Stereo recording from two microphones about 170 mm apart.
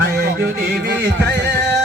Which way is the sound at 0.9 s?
90° right.